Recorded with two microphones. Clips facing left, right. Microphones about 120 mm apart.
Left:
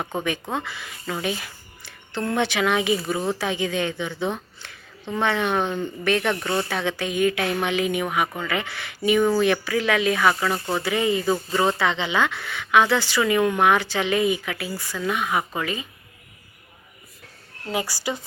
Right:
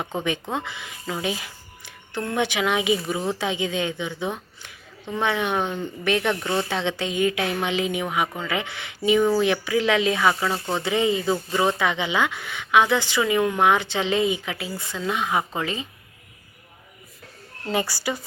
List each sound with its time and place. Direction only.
0.5 s a woman's voice: 20° right (ahead or behind)
17.7 s a woman's voice: 15° left (ahead or behind)